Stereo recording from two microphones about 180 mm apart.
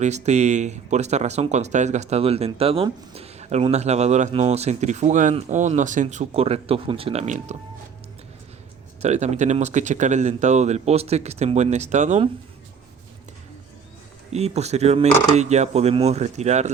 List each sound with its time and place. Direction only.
0.0 s speech: 40° right (ahead or behind)
9.0 s speech: 40° right (ahead or behind)
14.3 s speech: 35° right (ahead or behind)